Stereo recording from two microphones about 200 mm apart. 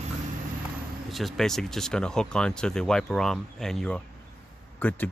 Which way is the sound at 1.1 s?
Centre (ahead or behind).